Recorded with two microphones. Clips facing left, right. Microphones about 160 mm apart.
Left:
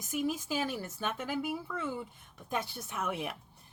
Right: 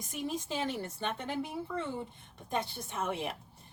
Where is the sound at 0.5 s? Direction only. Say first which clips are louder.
Left 1 dB; 25° right (ahead or behind).